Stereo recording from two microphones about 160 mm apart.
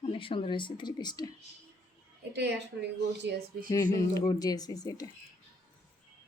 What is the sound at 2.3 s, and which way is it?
A woman's voice, 90° right.